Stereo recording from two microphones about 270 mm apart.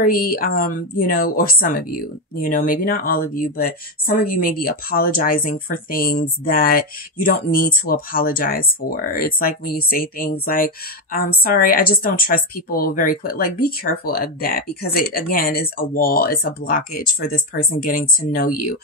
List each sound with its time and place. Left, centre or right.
0.0 s a woman's voice: left